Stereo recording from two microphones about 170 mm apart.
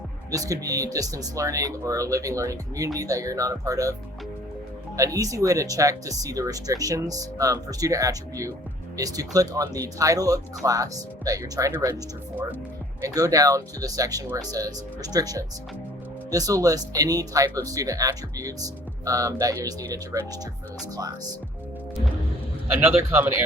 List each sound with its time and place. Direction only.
0.3 s speech: 20° right (ahead or behind)
4.9 s speech: 20° right (ahead or behind)
13.0 s speech: 20° right (ahead or behind)
22.7 s a man's voice: 15° right (ahead or behind)